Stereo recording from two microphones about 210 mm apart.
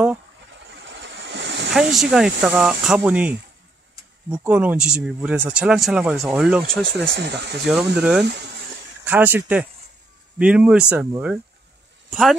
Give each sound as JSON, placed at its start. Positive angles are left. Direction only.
{"t": 0.7, "sound": "vehicle", "side_deg": -60}
{"t": 1.7, "sound": "speech", "side_deg": 0}
{"t": 7.1, "sound": "speech", "side_deg": -55}
{"t": 8.0, "sound": "speech", "side_deg": -5}